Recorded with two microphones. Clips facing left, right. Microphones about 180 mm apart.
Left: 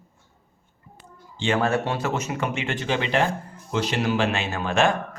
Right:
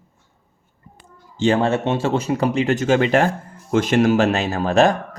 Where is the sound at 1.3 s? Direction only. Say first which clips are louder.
Right 5 dB; 35° right (ahead or behind).